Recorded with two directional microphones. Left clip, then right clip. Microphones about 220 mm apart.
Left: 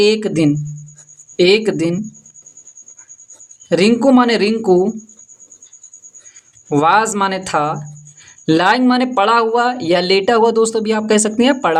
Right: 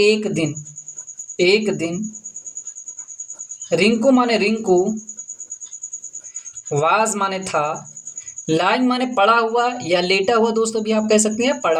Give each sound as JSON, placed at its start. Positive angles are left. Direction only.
{"t": 0.0, "sound": "speech", "side_deg": 40}
{"t": 3.7, "sound": "speech", "side_deg": 40}
{"t": 6.7, "sound": "speech", "side_deg": 35}